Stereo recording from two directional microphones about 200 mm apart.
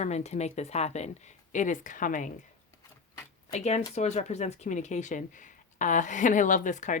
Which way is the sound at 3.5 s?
35° left (ahead or behind).